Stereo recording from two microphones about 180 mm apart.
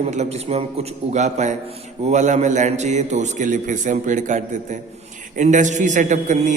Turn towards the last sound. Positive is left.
turn(degrees=-45)  # may be behind; listen again after turning